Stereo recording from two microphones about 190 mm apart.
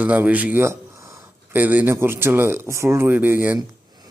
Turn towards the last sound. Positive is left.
turn(degrees=-20)  # may be behind; listen again after turning